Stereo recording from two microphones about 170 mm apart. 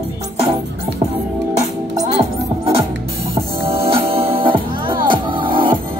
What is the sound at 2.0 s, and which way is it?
Music, 35° right (ahead or behind).